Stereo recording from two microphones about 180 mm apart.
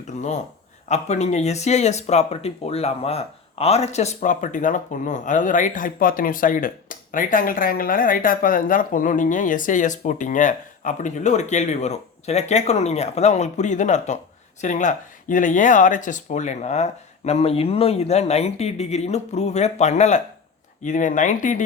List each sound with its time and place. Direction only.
0.2 s speech: 40° left (ahead or behind)